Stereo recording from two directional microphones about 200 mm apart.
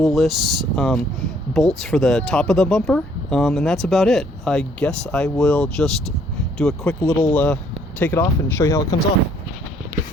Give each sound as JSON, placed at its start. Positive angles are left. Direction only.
{"t": 0.0, "sound": "speech", "side_deg": 0}
{"t": 7.0, "sound": "speech", "side_deg": 15}